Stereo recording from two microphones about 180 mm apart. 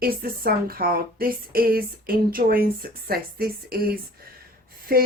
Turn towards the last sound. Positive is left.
turn(degrees=-55)  # may be behind; listen again after turning